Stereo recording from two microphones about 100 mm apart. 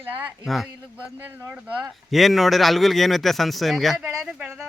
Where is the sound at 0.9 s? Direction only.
15° right (ahead or behind).